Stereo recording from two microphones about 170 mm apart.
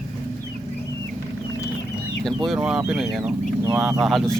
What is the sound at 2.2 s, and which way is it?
Speech, centre (ahead or behind).